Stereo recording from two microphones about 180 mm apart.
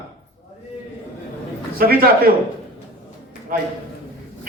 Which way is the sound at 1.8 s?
55° right (ahead or behind).